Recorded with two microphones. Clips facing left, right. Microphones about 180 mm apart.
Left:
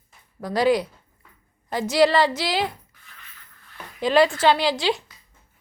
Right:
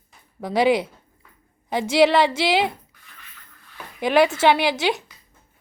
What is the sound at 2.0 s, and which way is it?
Speech, 20° right (ahead or behind).